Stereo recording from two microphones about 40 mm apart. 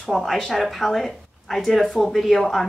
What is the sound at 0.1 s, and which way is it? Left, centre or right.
A woman's voice, centre.